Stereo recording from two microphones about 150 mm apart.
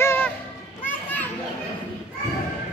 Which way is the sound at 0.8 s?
15° left (ahead or behind).